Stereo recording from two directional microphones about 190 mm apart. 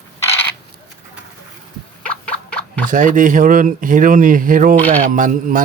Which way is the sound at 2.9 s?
45° right (ahead or behind).